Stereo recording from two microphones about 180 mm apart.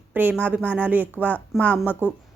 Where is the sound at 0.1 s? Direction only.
10° right (ahead or behind).